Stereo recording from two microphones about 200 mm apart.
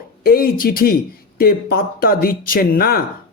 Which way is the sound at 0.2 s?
50° left (ahead or behind).